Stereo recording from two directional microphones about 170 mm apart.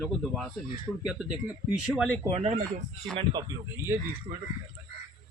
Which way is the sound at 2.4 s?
40° right (ahead or behind).